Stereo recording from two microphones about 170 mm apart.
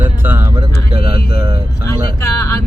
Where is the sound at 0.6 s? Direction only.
35° right (ahead or behind).